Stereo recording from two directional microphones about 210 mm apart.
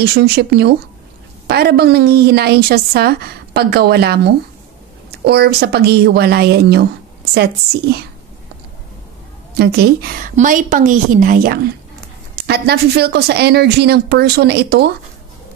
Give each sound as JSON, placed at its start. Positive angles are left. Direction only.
{"t": 0.0, "sound": "a woman's voice", "side_deg": -50}
{"t": 9.5, "sound": "a woman's voice", "side_deg": -50}